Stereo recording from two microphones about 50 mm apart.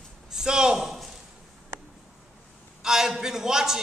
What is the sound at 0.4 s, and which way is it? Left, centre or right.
Speech, centre.